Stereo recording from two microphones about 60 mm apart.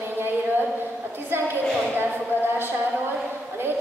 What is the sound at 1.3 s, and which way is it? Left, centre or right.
Speech, right.